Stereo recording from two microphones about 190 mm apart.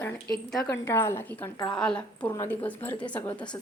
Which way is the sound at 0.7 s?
10° left (ahead or behind).